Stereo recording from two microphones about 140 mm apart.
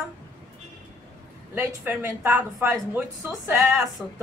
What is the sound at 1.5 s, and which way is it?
A woman's voice, 15° right (ahead or behind).